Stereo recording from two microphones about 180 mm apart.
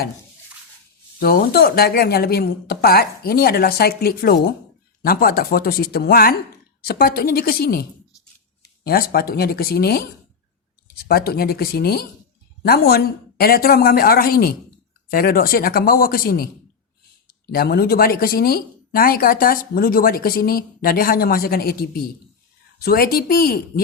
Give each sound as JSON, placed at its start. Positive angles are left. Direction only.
{"t": 1.2, "sound": "a woman's voice", "side_deg": 60}